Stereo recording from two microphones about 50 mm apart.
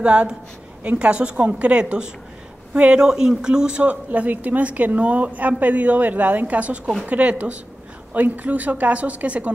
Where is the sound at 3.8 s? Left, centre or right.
Right.